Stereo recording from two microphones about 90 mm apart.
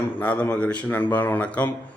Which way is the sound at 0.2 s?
20° left (ahead or behind).